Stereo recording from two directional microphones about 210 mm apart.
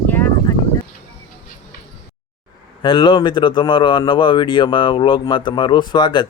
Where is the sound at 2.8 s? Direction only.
25° left (ahead or behind).